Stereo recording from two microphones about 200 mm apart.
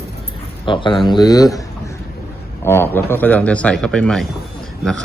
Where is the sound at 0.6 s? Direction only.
25° left (ahead or behind).